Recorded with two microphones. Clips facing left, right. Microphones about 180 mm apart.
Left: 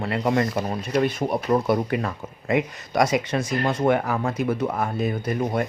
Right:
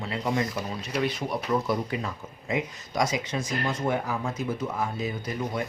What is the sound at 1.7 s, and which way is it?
Speech, 65° left (ahead or behind).